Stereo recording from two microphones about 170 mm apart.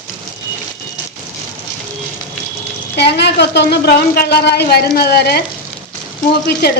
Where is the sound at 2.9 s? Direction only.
85° left.